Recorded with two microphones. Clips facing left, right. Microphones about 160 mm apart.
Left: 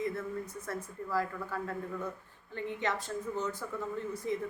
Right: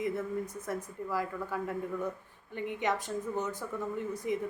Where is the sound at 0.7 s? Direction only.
15° right (ahead or behind).